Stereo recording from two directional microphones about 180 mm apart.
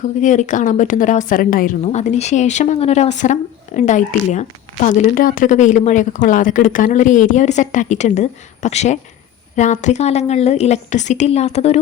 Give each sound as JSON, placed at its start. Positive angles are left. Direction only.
{"t": 0.0, "sound": "a woman's voice", "side_deg": 45}